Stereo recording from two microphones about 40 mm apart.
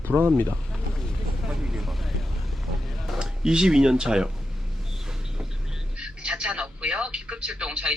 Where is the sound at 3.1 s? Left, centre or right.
Centre.